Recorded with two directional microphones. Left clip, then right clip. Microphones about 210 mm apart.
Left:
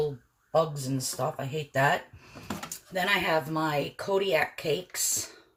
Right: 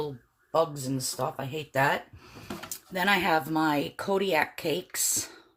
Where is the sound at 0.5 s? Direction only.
45° right (ahead or behind).